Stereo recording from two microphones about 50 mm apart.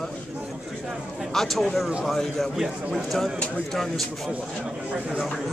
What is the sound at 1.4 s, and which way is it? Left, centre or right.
A man's voice, centre.